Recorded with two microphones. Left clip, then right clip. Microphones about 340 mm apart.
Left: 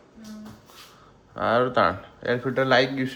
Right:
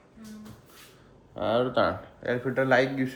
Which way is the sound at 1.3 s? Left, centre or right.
Left.